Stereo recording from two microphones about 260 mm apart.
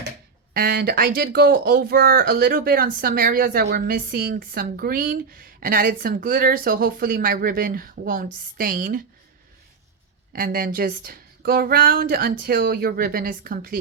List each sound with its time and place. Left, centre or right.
0.5 s speech: right
10.3 s speech: right